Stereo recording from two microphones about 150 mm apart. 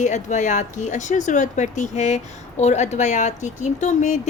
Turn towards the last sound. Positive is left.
turn(degrees=55)  # may be behind; listen again after turning